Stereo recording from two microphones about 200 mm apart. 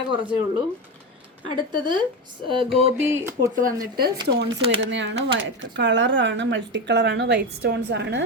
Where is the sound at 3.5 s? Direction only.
45° right (ahead or behind).